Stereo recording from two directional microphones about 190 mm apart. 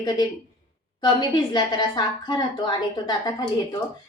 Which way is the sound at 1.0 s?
20° left (ahead or behind).